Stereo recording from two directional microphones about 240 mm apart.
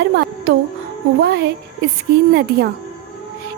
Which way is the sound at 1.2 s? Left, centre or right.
Right.